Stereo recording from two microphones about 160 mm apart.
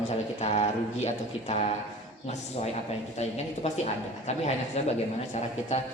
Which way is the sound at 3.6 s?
40° left (ahead or behind).